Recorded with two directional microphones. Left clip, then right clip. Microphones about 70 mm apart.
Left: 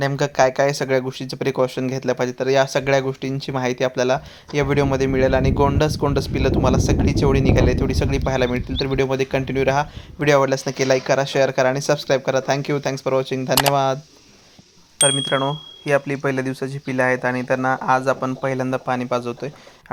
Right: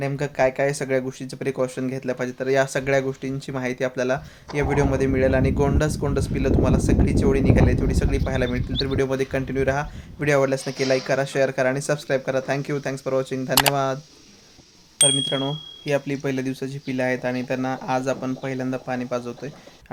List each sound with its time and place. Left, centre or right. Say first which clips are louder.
0.0 s speech: left 4 dB; left
0.7 s speech: left 4 dB; left
2.1 s speech: left 3 dB; left
9.0 s speech: left 4 dB; left
11.1 s speech: left 4 dB; left
13.5 s speech: left 2 dB; centre
13.7 s speech: left 5 dB; left
14.9 s speech: left 3 dB; centre
18.7 s speech: left 5 dB; left